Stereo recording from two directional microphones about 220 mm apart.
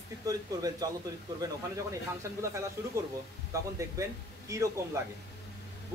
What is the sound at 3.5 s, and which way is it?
Speech, 15° right (ahead or behind).